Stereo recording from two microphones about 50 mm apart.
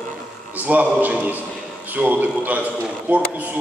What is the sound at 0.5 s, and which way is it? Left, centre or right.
A man's voice, right.